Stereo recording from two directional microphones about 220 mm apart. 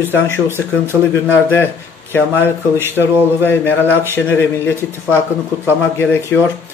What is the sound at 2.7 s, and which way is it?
Speech, 10° right (ahead or behind).